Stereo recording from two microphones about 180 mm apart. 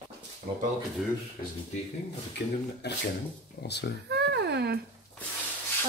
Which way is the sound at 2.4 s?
70° left (ahead or behind).